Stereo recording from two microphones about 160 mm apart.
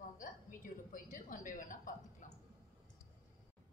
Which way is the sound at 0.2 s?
55° left (ahead or behind).